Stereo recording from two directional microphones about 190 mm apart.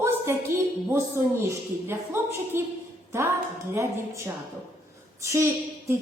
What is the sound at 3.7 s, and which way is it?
A woman's voice, 15° right (ahead or behind).